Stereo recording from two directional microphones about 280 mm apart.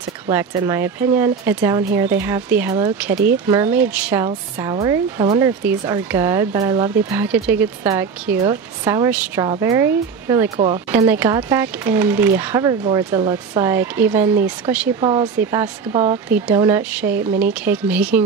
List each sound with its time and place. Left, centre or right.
0.3 s speech: centre
15.9 s speech: right
16.3 s speech: centre